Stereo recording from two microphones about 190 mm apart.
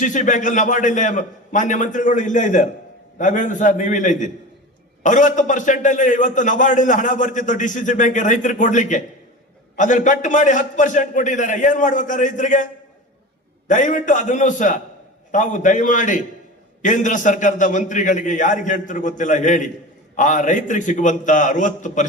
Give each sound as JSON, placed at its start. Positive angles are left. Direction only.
{"t": 0.0, "sound": "a man's voice", "side_deg": 40}
{"t": 13.7, "sound": "a man's voice", "side_deg": 40}